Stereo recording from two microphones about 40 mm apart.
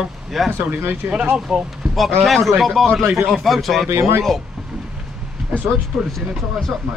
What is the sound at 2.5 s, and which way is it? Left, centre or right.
A man's voice, centre.